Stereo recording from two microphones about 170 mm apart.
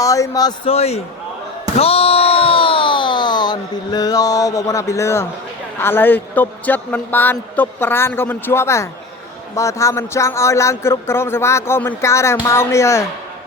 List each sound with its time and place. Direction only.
0.0 s speech: 20° left (ahead or behind)
0.7 s a man's voice: 40° left (ahead or behind)
1.7 s a sound: 35° left (ahead or behind); by 5.2 s 15° left (ahead or behind)
5.8 s a man's voice: 10° left (ahead or behind)